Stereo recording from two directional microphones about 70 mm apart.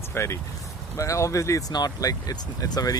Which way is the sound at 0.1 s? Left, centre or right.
Left.